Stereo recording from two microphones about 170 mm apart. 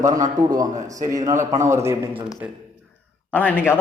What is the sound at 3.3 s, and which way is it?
Speech, 10° left (ahead or behind).